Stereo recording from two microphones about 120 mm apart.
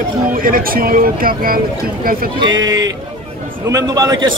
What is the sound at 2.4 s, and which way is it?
Speech, 30° right (ahead or behind).